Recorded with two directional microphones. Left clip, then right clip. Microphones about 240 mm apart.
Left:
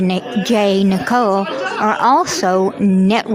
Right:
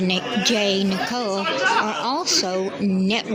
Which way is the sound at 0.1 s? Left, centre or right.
Left.